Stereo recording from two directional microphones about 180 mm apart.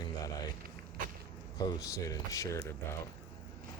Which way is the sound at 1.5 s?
20° left (ahead or behind).